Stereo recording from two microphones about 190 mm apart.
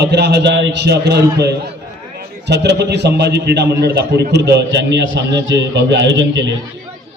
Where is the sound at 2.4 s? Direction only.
65° right (ahead or behind).